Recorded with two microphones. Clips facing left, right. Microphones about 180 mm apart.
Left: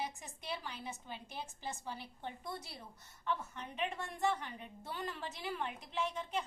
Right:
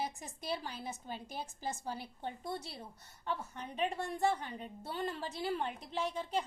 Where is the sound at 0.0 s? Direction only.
35° right (ahead or behind).